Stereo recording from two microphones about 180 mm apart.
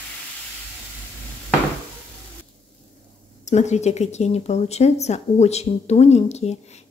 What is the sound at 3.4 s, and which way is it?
Speech, 40° left (ahead or behind).